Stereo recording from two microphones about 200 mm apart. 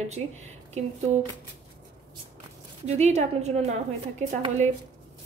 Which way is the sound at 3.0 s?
35° right (ahead or behind).